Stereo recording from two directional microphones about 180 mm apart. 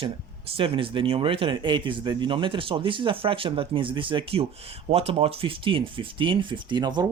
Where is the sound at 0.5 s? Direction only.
30° right (ahead or behind).